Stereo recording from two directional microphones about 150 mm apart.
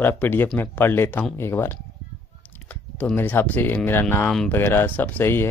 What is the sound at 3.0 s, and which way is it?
Speech, 10° left (ahead or behind).